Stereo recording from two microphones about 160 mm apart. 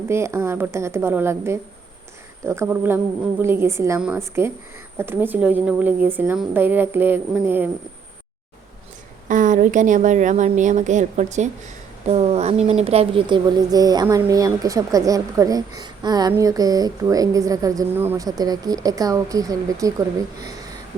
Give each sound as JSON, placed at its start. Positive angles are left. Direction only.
{"t": 0.1, "sound": "a woman's voice", "side_deg": -15}
{"t": 9.3, "sound": "a woman's voice", "side_deg": -55}